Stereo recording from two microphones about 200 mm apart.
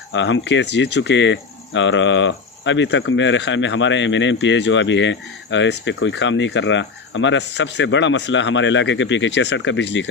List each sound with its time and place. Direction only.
0.1 s speech: 65° left (ahead or behind)